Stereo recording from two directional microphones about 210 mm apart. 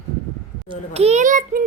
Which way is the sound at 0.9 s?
30° right (ahead or behind).